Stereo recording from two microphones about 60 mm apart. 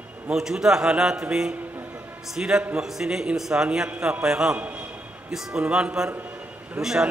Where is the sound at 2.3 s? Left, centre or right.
Centre.